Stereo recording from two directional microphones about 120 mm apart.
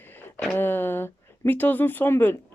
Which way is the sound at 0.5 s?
15° left (ahead or behind).